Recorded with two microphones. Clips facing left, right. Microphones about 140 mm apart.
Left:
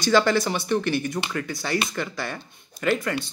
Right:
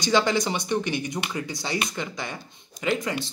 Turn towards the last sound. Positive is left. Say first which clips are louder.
# left 2 dB
turn(degrees=-20)  # may be behind; listen again after turning